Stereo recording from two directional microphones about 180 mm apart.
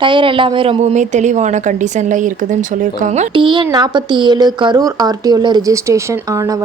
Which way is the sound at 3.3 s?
25° right (ahead or behind).